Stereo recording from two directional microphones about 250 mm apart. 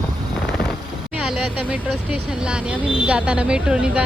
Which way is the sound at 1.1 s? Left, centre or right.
Centre.